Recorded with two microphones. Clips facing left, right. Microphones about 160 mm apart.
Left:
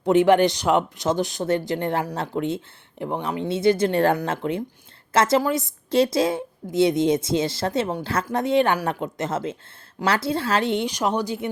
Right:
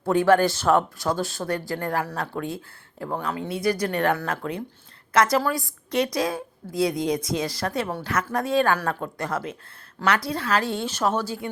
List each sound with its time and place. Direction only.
0.0 s a woman's voice: 20° left (ahead or behind)